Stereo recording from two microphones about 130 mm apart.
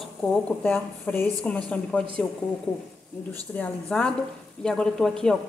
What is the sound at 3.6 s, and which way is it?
Speech, 10° left (ahead or behind).